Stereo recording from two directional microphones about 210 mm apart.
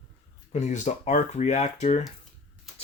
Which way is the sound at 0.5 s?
35° left (ahead or behind).